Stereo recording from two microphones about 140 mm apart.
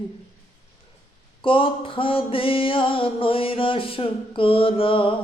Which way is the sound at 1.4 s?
40° left (ahead or behind).